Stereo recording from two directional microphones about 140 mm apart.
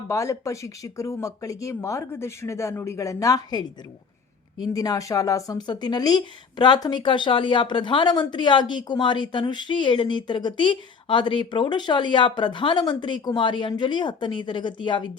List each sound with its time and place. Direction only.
0.1 s speech: 20° left (ahead or behind)